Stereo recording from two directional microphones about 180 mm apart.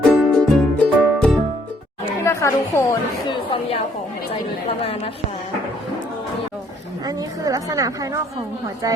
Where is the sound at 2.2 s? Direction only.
15° left (ahead or behind).